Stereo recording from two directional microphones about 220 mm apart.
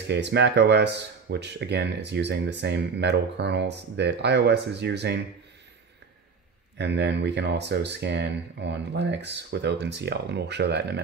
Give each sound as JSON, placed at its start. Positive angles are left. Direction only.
{"t": 0.0, "sound": "speech", "side_deg": -50}
{"t": 6.8, "sound": "speech", "side_deg": -50}